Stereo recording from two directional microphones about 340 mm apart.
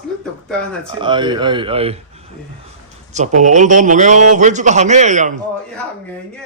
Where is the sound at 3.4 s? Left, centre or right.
Right.